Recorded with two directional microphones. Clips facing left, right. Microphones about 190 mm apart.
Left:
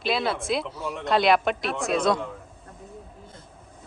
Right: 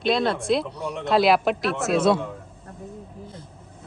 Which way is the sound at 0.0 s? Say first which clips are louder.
Right 4 dB; 5° left (ahead or behind).